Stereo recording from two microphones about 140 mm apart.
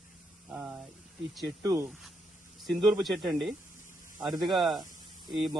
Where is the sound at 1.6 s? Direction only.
20° right (ahead or behind).